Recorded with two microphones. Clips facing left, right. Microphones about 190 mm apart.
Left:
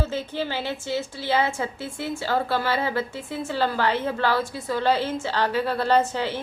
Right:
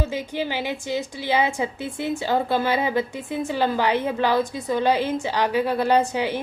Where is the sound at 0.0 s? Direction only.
15° right (ahead or behind).